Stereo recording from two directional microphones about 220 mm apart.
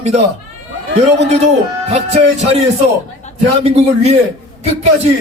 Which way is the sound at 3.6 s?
30° right (ahead or behind).